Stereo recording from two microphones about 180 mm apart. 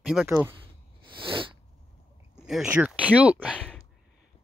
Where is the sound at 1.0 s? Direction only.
30° right (ahead or behind).